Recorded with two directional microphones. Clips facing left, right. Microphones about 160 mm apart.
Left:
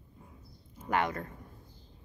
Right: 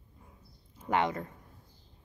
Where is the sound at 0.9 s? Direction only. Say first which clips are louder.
Right 1 dB; 20° right (ahead or behind).